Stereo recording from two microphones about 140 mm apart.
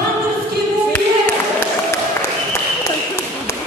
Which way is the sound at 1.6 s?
20° left (ahead or behind).